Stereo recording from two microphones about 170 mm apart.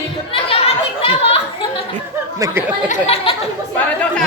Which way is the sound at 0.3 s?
35° left (ahead or behind).